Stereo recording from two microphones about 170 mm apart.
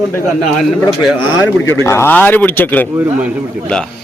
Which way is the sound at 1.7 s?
15° left (ahead or behind).